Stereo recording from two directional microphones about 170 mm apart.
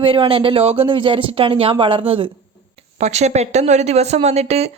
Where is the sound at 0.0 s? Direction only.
30° right (ahead or behind).